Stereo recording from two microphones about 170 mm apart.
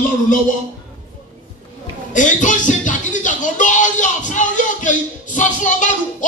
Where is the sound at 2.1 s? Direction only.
45° left (ahead or behind).